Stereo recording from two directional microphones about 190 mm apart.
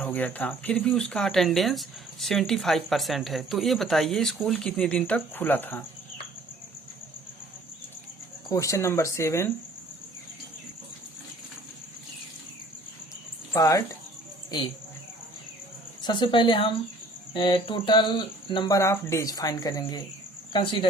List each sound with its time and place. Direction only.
0.0 s speech: 10° left (ahead or behind)
8.4 s speech: 15° left (ahead or behind)
13.5 s speech: 15° left (ahead or behind)
16.0 s speech: 25° left (ahead or behind)